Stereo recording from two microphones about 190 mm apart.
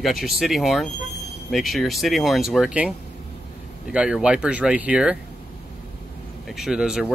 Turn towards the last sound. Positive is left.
turn(degrees=-5)  # may be behind; listen again after turning